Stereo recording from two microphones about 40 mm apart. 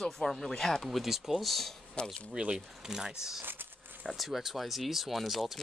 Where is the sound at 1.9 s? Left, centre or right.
Left.